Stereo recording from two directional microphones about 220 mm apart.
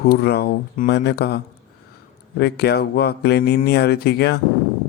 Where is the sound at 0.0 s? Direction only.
45° left (ahead or behind).